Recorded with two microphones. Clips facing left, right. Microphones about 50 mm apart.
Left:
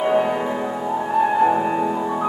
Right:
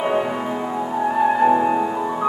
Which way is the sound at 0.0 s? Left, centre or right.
Centre.